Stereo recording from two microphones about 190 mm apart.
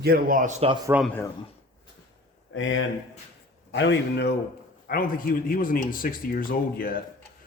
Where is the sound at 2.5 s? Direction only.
90° left.